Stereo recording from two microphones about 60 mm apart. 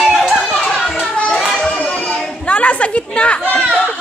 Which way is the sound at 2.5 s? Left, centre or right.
Left.